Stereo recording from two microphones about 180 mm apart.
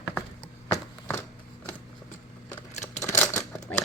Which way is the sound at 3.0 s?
15° left (ahead or behind).